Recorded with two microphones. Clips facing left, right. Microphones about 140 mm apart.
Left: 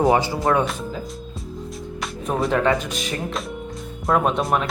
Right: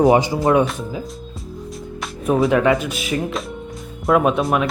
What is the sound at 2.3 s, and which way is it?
Speech, 5° right (ahead or behind).